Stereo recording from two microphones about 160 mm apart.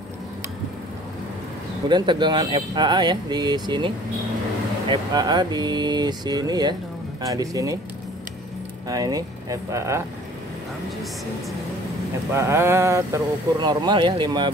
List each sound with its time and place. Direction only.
1.9 s speech: 30° right (ahead or behind)
8.8 s speech: 25° right (ahead or behind)
12.3 s speech: 15° right (ahead or behind)